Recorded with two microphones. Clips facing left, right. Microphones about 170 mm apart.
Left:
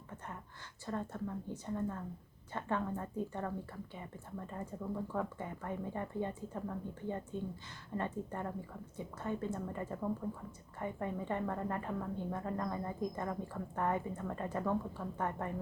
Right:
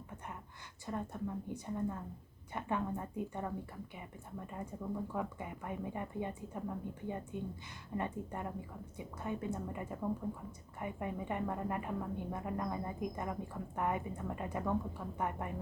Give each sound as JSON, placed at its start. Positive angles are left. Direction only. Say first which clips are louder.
{"t": 0.9, "sound": "a woman's voice", "louder": "even", "side_deg": -15}